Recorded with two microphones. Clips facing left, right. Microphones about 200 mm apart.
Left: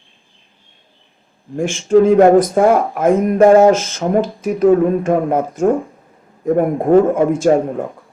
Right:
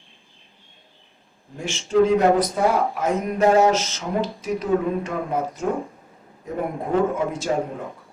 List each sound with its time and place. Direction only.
1.5 s speech: 50° left (ahead or behind)